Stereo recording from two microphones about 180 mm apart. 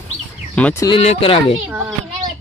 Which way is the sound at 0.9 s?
30° left (ahead or behind).